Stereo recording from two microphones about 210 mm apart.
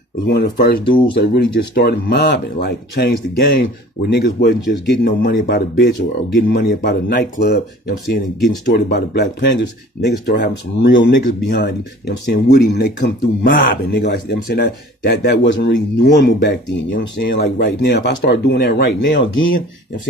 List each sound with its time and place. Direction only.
0.3 s speech: 45° left (ahead or behind)
8.7 s speech: 50° left (ahead or behind); by 19.6 s 65° left (ahead or behind)